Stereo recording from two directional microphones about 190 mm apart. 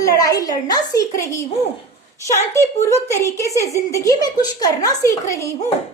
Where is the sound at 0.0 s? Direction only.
20° left (ahead or behind).